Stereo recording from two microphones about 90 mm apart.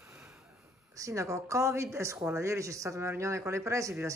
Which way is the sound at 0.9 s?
35° right (ahead or behind).